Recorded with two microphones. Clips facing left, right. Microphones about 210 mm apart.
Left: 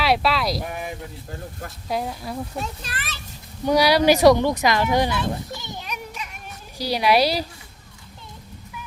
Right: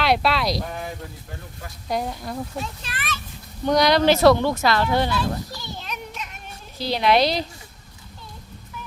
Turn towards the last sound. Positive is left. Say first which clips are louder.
# even
turn(degrees=10)  # may be behind; listen again after turning